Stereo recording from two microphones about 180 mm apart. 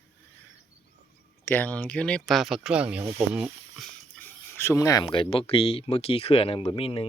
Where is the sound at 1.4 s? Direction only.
10° left (ahead or behind).